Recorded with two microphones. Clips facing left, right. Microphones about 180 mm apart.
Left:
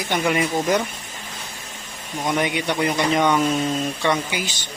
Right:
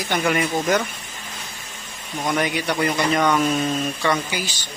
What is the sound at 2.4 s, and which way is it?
Speech, 20° left (ahead or behind).